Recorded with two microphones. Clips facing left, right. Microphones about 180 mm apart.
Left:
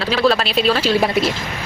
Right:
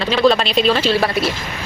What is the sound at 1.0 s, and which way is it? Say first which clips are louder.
Speech: left 1 dB; 20° left (ahead or behind).